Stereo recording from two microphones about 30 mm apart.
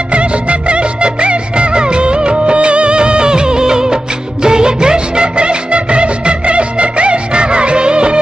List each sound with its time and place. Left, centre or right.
0.1 s music of bollywood: right
4.4 s music: right